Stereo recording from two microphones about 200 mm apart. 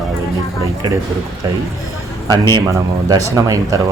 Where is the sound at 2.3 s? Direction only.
20° right (ahead or behind).